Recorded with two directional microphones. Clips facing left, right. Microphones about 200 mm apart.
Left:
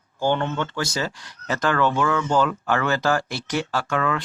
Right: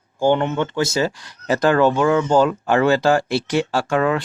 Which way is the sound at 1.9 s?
25° right (ahead or behind).